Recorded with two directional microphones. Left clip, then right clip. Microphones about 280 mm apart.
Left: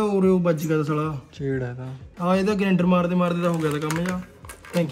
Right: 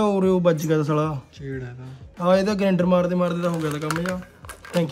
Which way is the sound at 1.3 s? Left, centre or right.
Centre.